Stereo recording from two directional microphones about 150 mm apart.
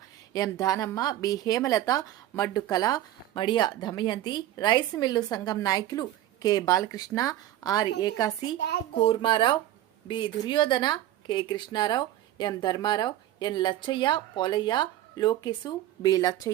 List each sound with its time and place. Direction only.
0.3 s a woman's voice: 25° left (ahead or behind)